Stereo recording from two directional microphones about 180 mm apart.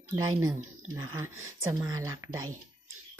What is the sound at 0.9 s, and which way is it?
Speech, 15° right (ahead or behind).